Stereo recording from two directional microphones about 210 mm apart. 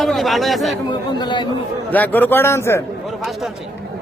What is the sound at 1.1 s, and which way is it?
Speech, 20° left (ahead or behind).